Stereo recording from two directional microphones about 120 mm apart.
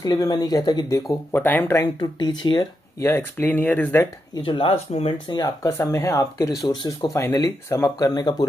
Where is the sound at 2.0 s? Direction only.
40° left (ahead or behind).